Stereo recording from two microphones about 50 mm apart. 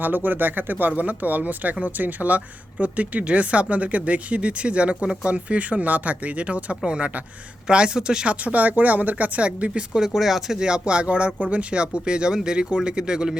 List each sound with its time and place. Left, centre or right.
0.0 s speech: right
10.0 s speech: centre